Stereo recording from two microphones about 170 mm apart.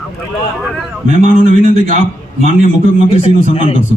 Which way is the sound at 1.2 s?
40° right (ahead or behind).